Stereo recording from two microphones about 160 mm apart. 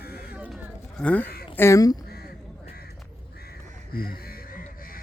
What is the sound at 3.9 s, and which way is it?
Speech, 65° left (ahead or behind).